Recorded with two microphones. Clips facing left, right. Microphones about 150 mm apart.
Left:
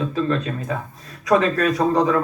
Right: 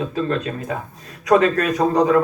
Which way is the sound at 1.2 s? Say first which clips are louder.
Right 2 dB; 45° right (ahead or behind).